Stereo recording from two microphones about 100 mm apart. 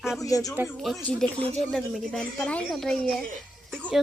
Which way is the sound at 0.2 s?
35° left (ahead or behind).